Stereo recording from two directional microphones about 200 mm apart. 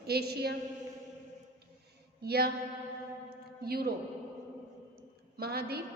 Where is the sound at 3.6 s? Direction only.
50° right (ahead or behind).